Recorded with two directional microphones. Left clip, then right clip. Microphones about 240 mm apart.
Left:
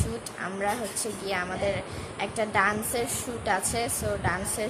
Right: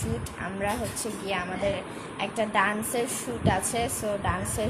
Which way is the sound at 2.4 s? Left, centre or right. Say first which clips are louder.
Even; centre.